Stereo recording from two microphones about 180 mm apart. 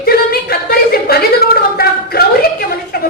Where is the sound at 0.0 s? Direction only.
60° left (ahead or behind).